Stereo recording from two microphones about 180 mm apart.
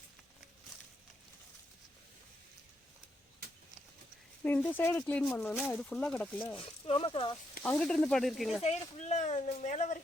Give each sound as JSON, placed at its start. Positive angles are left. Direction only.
{"t": 4.4, "sound": "speech", "side_deg": 10}
{"t": 6.6, "sound": "speech", "side_deg": 30}
{"t": 7.6, "sound": "speech", "side_deg": 5}
{"t": 8.6, "sound": "speech", "side_deg": 40}